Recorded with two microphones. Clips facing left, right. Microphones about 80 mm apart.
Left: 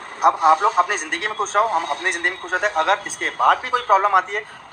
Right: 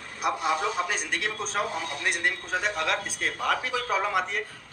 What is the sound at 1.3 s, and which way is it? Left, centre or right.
Speech, left.